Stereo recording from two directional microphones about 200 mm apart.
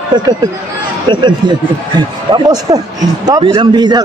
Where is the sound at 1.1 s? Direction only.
20° right (ahead or behind).